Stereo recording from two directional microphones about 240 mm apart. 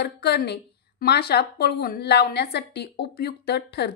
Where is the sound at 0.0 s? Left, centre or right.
Left.